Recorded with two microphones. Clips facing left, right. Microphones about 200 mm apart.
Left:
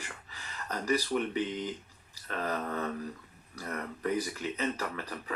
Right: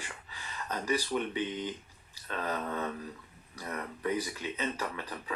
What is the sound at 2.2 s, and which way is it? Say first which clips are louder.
Speech: left 1 dB; 45° left (ahead or behind).